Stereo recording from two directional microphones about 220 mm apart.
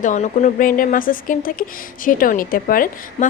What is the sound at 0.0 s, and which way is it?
A woman's voice, 35° left (ahead or behind).